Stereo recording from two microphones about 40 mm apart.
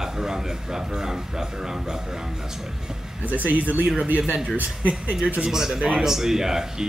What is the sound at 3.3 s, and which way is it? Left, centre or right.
Speech, right.